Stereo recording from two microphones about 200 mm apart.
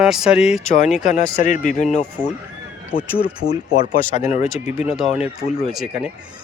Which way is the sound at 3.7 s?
45° left (ahead or behind).